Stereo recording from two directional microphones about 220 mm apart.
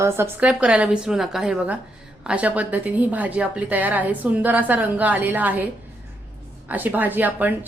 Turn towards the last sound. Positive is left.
turn(degrees=-10)  # may be behind; listen again after turning